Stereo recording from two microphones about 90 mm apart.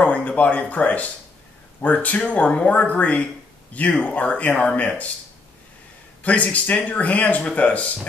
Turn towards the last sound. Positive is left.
turn(degrees=15)  # may be behind; listen again after turning